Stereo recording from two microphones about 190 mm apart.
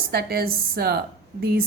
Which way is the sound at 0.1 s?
55° right (ahead or behind).